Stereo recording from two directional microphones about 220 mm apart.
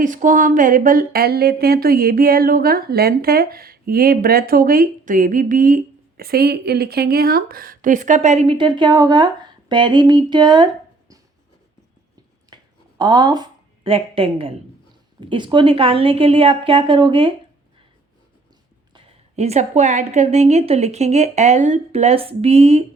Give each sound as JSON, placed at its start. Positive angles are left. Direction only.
{"t": 0.0, "sound": "speech", "side_deg": -35}
{"t": 12.5, "sound": "a sound", "side_deg": -20}
{"t": 13.0, "sound": "a woman's voice", "side_deg": -20}
{"t": 18.9, "sound": "a woman's voice", "side_deg": -30}